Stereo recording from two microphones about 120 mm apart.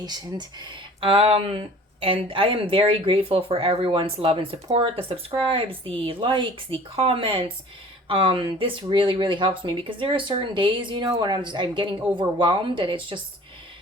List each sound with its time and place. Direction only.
0.0 s speech: 35° right (ahead or behind)
1.0 s speech: 50° right (ahead or behind)